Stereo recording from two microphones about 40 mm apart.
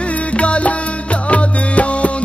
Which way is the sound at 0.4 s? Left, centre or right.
Left.